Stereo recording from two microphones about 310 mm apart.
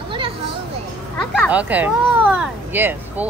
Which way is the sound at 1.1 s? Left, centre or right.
Centre.